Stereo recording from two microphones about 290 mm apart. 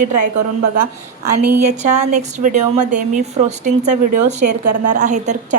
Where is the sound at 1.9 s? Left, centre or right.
Right.